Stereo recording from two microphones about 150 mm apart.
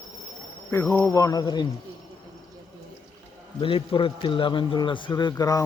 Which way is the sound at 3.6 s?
35° left (ahead or behind).